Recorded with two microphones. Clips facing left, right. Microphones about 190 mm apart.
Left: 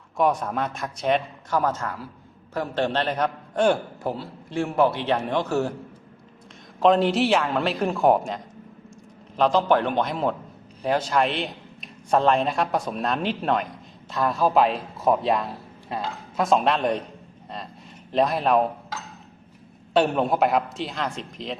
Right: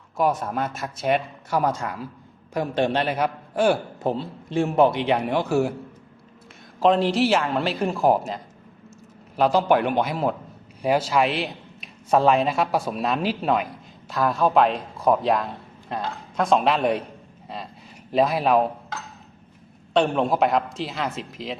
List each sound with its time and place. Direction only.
0.2 s a man's voice: 5° right (ahead or behind)
4.0 s a man's voice: 25° right (ahead or behind)
6.7 s a man's voice: centre (ahead or behind)
18.1 s a man's voice: 5° right (ahead or behind)